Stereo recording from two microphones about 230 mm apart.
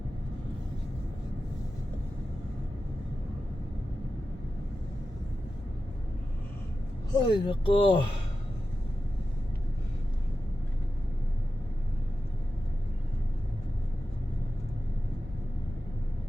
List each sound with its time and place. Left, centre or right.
7.1 s speech: centre